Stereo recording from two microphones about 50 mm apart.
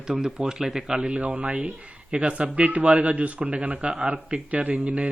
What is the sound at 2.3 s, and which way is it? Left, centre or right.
A man's voice, right.